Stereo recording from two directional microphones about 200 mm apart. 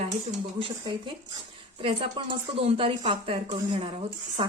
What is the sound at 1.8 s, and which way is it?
Speech, 25° right (ahead or behind).